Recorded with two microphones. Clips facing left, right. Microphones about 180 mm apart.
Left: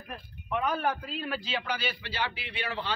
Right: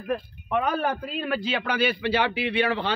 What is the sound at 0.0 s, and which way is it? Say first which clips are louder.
Speech: right 14 dB; 75° right (ahead or behind).